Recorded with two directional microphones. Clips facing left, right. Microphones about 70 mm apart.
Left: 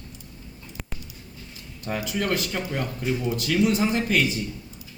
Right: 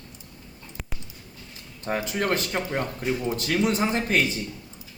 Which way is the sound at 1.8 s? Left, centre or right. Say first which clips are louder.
Right 1 dB; right.